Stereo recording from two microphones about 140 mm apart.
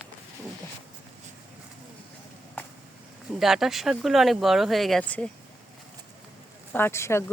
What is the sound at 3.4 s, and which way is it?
Speech, centre (ahead or behind).